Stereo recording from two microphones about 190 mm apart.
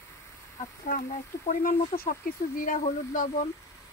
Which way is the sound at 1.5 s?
50° left (ahead or behind).